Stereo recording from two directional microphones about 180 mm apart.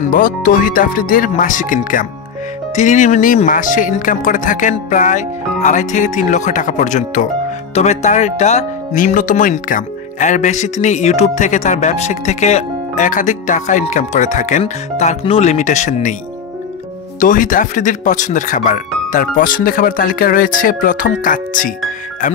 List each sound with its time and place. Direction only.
0.1 s speech: 50° left (ahead or behind)
17.2 s speech: 50° left (ahead or behind)